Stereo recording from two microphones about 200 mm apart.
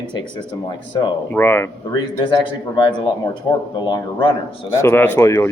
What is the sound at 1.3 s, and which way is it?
A man's voice, 10° left (ahead or behind).